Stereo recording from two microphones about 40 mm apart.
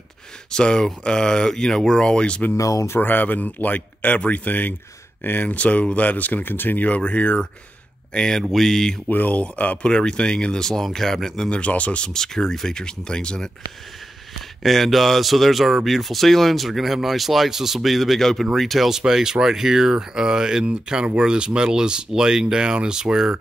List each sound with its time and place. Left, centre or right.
0.5 s speech: centre
3.0 s speech: left
5.6 s speech: left
6.4 s speech: left
6.8 s speech: left
8.1 s speech: centre
9.1 s speech: left
9.4 s speech: left
10.7 s speech: centre
11.5 s speech: left
12.1 s speech: centre
14.6 s speech: centre
18.9 s speech: centre